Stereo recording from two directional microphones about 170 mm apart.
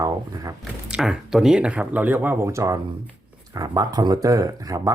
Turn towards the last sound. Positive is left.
turn(degrees=-20)  # may be behind; listen again after turning